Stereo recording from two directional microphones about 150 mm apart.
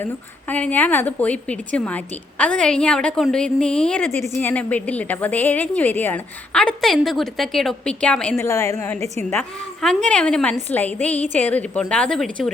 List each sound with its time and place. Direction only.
0.0 s a woman's voice: 10° left (ahead or behind)
8.4 s a woman's voice: 20° left (ahead or behind)
9.3 s a woman's voice: 5° left (ahead or behind)